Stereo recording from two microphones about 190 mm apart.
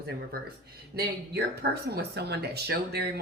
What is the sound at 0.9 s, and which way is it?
Speech, 55° right (ahead or behind).